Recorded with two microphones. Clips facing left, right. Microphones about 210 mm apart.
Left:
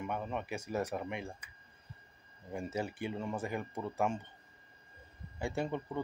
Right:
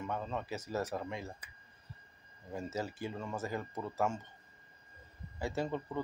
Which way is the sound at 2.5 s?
15° left (ahead or behind).